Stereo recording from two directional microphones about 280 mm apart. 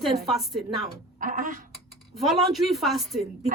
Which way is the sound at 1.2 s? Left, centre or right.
Right.